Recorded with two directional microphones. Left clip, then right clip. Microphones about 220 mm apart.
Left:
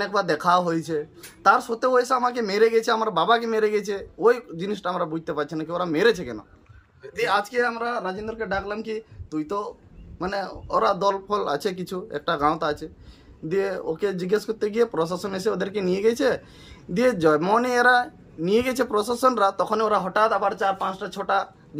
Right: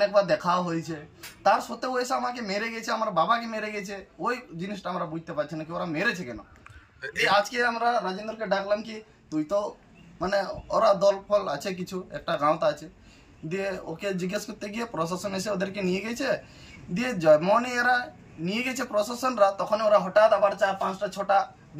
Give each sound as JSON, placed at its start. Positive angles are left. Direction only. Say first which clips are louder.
{"t": 0.0, "sound": "speech", "louder": "even", "side_deg": 20}
{"t": 7.4, "sound": "a man's voice", "louder": "left 1 dB", "side_deg": 20}